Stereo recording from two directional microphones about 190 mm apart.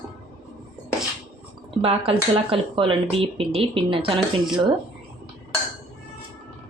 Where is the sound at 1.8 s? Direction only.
30° right (ahead or behind).